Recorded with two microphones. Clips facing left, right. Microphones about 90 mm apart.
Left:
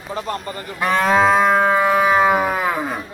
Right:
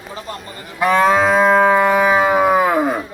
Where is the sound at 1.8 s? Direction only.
Centre (ahead or behind).